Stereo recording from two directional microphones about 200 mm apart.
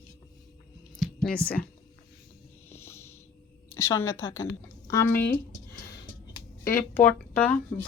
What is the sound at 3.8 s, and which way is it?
Speech, 15° left (ahead or behind).